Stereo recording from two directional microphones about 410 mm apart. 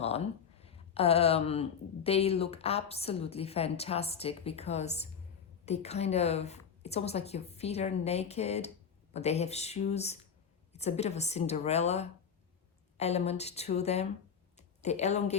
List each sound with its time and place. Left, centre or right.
0.0 s a woman's voice: centre